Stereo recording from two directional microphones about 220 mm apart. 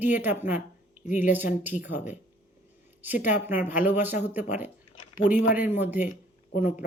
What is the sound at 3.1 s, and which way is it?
Speech, 35° left (ahead or behind).